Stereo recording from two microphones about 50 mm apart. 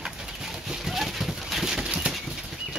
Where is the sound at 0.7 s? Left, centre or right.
Centre.